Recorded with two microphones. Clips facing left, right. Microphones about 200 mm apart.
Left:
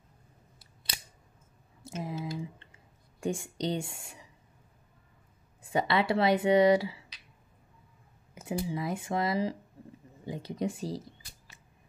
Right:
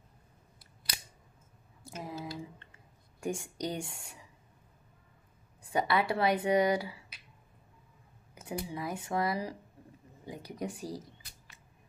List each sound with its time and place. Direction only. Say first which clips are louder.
1.9 s speech: left 4 dB; 25° left (ahead or behind)
5.6 s speech: left 2 dB; 25° left (ahead or behind)
8.4 s speech: left 4 dB; 25° left (ahead or behind)